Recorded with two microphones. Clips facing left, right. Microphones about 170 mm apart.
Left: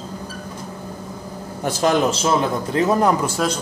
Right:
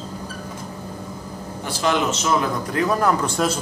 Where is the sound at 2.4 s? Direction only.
25° left (ahead or behind).